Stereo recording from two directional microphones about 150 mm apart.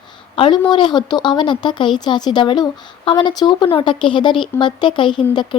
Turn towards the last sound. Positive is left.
turn(degrees=35)  # may be behind; listen again after turning